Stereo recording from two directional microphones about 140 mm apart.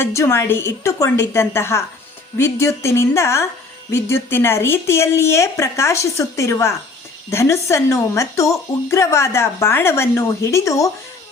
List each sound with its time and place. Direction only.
0.0 s a woman's voice: 20° left (ahead or behind)